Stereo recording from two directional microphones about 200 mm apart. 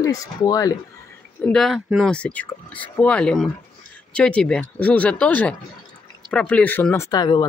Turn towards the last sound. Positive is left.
turn(degrees=20)  # may be behind; listen again after turning